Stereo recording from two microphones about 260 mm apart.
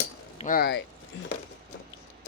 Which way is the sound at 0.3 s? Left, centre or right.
Left.